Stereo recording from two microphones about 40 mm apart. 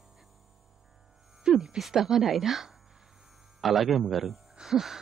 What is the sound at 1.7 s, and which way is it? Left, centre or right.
Speech, centre.